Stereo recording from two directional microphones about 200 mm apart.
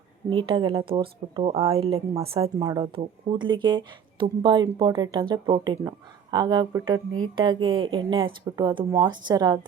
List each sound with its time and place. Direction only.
0.3 s speech: 25° right (ahead or behind)